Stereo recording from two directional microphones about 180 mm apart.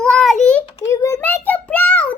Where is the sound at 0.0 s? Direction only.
5° left (ahead or behind).